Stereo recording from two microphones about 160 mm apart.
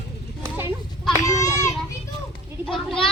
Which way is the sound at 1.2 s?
20° left (ahead or behind).